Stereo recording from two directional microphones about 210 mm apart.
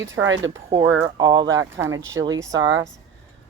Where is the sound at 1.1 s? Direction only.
20° right (ahead or behind).